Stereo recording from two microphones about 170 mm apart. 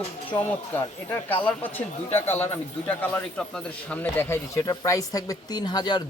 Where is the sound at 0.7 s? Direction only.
10° left (ahead or behind).